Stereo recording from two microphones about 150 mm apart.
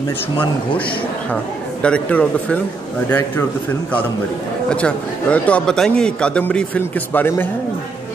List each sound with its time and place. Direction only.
1.3 s a man's voice: 10° left (ahead or behind)
4.6 s a man's voice: 10° left (ahead or behind)